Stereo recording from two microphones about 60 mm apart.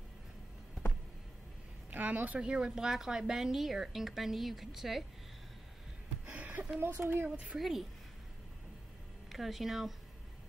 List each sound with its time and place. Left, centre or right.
1.9 s a woman's voice: right
2.4 s speech: centre
6.2 s a sound: right
6.8 s speech: right
7.5 s speech: centre
9.3 s speech: centre